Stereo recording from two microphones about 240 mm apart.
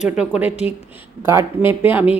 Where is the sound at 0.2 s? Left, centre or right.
Centre.